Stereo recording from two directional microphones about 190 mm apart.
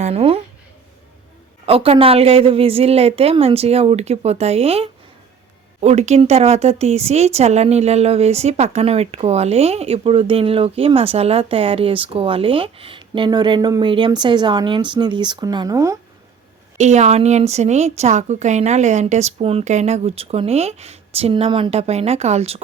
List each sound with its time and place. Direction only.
0.0 s speech: 30° right (ahead or behind)
1.6 s speech: 30° right (ahead or behind)
16.7 s speech: 35° right (ahead or behind)